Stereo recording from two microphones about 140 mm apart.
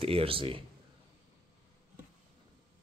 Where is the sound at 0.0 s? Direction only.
45° right (ahead or behind).